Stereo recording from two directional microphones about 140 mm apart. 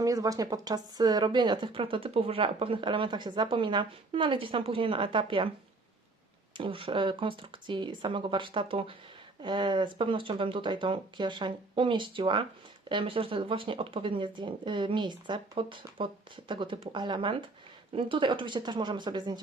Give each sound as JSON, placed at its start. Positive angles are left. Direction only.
{"t": 0.0, "sound": "speech", "side_deg": -25}
{"t": 6.6, "sound": "speech", "side_deg": -40}